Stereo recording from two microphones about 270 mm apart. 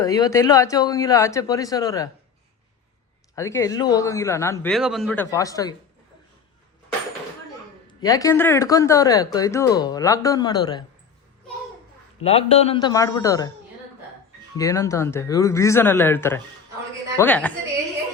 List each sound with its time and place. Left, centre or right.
0.0 s speech: centre
3.3 s speech: centre
8.0 s speech: centre
12.2 s speech: left
14.5 s a woman's voice: centre